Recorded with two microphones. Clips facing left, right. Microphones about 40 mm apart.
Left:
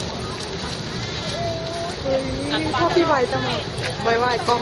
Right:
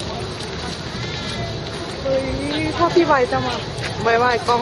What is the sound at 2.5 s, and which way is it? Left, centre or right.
Vehicle, centre.